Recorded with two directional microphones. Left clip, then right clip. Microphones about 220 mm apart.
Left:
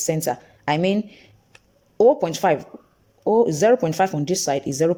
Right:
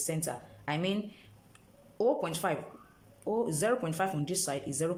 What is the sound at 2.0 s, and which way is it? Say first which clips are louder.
Speech: left 13 dB; 35° left (ahead or behind).